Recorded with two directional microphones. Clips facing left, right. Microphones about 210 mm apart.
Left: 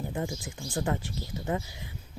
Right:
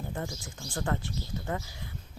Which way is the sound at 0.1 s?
15° left (ahead or behind).